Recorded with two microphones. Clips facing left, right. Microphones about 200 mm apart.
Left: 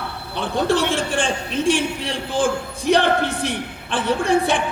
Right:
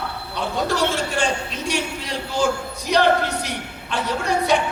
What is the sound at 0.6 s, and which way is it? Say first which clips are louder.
Speech: left 3 dB; 30° left (ahead or behind).